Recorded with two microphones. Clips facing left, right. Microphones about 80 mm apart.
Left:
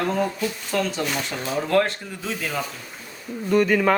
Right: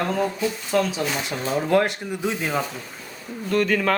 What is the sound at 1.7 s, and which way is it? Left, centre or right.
Speech, centre.